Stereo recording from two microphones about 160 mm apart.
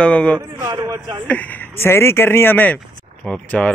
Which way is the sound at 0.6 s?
25° right (ahead or behind).